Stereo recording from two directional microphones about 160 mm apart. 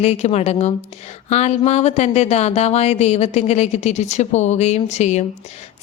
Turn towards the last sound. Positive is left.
turn(degrees=45)  # may be behind; listen again after turning